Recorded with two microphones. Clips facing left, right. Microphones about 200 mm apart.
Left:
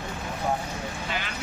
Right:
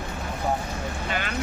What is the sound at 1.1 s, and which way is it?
Speech, 55° right (ahead or behind).